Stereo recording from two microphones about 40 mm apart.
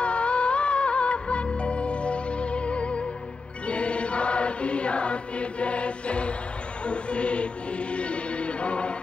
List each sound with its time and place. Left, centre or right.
0.0 s music: left